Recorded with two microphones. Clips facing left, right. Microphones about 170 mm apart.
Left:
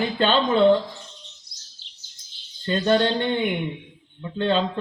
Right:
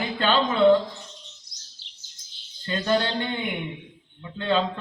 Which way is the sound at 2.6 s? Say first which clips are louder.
Left 4 dB; 25° left (ahead or behind).